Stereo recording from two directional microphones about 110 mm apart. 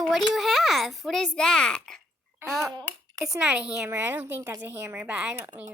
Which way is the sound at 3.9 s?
20° right (ahead or behind).